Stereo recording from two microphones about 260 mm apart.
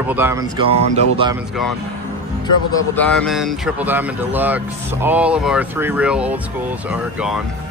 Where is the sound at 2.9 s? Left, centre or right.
Centre.